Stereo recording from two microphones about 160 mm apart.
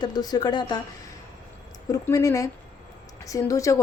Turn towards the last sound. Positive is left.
turn(degrees=20)  # may be behind; listen again after turning